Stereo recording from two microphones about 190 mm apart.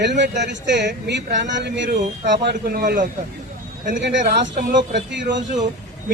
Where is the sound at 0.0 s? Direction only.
65° right (ahead or behind).